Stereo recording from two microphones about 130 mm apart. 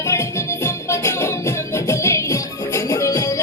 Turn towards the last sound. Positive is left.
turn(degrees=25)  # may be behind; listen again after turning